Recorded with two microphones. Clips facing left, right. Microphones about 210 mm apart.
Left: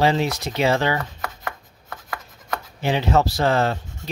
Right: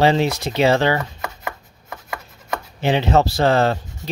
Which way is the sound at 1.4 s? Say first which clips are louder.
Right 2 dB; 10° right (ahead or behind).